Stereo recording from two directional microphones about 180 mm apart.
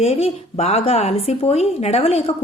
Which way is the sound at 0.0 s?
35° left (ahead or behind).